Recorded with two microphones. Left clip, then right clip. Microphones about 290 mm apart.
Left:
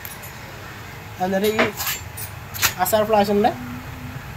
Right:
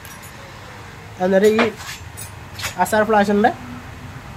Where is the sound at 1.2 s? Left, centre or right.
Centre.